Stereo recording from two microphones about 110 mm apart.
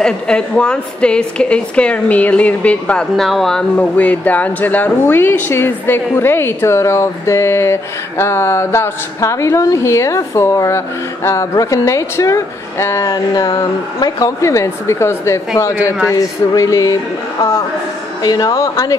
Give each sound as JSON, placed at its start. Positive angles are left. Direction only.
{"t": 0.0, "sound": "a woman's voice", "side_deg": 5}